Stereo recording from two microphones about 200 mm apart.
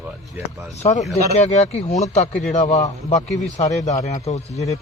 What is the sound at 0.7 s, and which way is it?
Speech, 35° left (ahead or behind).